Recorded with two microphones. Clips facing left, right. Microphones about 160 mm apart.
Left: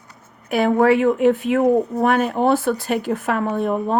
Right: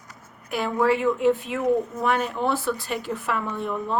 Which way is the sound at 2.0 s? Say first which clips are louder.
Left 6 dB; 55° left (ahead or behind).